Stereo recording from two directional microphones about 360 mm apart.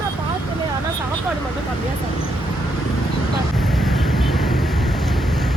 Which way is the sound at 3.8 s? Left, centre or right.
Centre.